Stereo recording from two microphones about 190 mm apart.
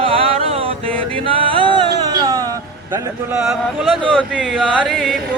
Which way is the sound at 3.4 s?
Centre (ahead or behind).